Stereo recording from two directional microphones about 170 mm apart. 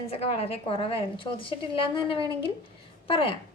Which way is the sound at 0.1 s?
35° left (ahead or behind).